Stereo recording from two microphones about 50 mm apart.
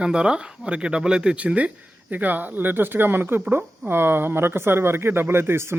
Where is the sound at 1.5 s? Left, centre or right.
Right.